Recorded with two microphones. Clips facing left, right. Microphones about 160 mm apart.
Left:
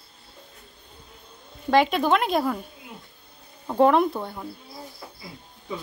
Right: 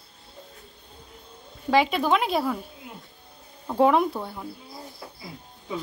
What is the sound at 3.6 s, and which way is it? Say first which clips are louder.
Speech: left 1 dB; 5° right (ahead or behind).